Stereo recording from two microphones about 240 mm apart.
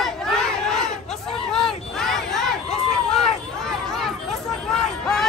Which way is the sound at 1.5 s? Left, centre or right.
Centre.